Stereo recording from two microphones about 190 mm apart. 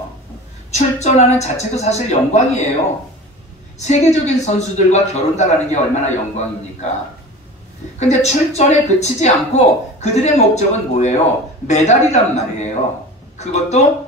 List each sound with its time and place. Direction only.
0.7 s speech: 35° left (ahead or behind)
3.7 s speech: 35° left (ahead or behind)
8.0 s speech: 35° left (ahead or behind)